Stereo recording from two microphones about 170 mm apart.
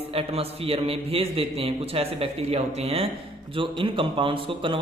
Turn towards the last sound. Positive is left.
turn(degrees=-30)  # may be behind; listen again after turning